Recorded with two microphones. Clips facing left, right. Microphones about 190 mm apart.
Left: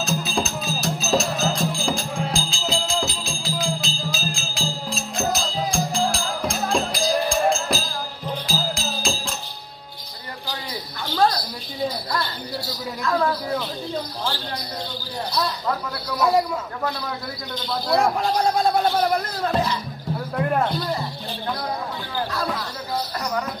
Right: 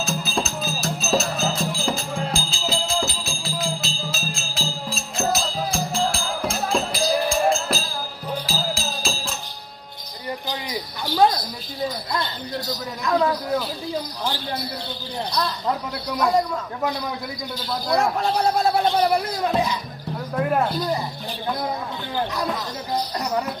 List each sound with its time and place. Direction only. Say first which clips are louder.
0.0 s music: left 1 dB; centre (ahead or behind)
10.5 s a sound: right 3 dB; 15° right (ahead or behind)
17.6 s a man's voice: left 1 dB; centre (ahead or behind)
22.1 s music: right 2 dB; 20° right (ahead or behind)